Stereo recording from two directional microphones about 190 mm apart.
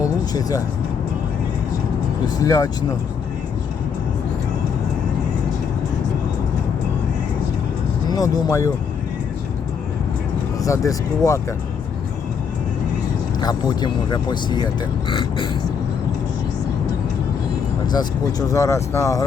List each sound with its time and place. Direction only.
0.0 s music: 20° left (ahead or behind)
2.2 s speech: 20° left (ahead or behind)
8.1 s speech: 15° left (ahead or behind)
10.6 s speech: 15° left (ahead or behind)
13.4 s speech: 20° left (ahead or behind)
17.9 s speech: 20° left (ahead or behind)